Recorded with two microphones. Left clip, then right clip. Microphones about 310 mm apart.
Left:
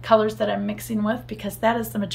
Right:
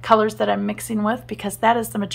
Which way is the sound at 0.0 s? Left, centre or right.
Centre.